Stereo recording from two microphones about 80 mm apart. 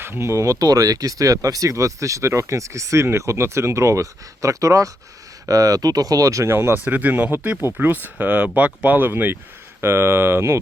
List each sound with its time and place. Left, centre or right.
0.0 s speech: right
6.8 s speech: right